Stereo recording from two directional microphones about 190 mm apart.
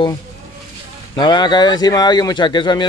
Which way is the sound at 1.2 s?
20° left (ahead or behind).